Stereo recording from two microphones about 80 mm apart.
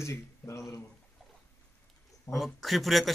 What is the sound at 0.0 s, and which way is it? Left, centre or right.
Speech, left.